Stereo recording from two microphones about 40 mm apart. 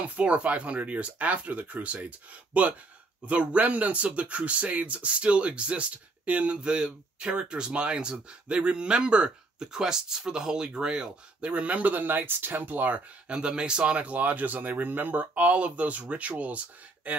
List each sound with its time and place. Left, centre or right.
0.2 s speech: right
13.3 s speech: right